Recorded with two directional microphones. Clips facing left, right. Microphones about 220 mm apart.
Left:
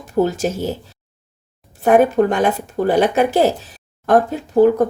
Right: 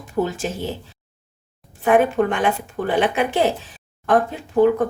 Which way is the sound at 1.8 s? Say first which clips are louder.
Left 4 dB; 40° left (ahead or behind).